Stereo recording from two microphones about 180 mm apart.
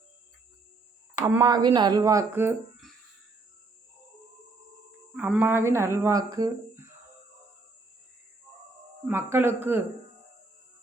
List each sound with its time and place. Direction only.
1.2 s speech: 15° right (ahead or behind)
5.1 s speech: 10° right (ahead or behind)
9.0 s speech: 15° right (ahead or behind)